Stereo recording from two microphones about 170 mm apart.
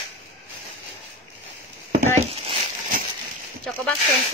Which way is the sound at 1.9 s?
35° right (ahead or behind).